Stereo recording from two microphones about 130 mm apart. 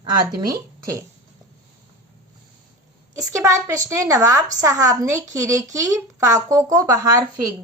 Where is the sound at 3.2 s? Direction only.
25° right (ahead or behind).